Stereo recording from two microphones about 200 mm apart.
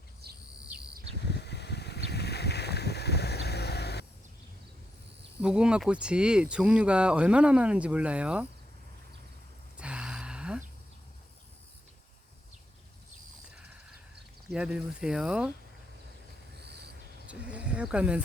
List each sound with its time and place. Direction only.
0.2 s bird: 50° right (ahead or behind)
1.3 s boat: 55° left (ahead or behind)
5.4 s speech: 5° right (ahead or behind)
9.7 s a sound: 5° right (ahead or behind)
14.5 s speech: 5° right (ahead or behind)
17.5 s wild animals: 5° right (ahead or behind)